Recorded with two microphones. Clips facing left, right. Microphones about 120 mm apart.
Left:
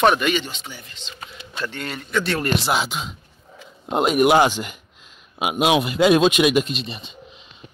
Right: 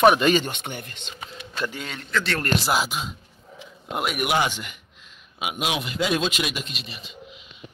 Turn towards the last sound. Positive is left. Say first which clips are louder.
# left 9 dB
turn(degrees=30)  # may be behind; listen again after turning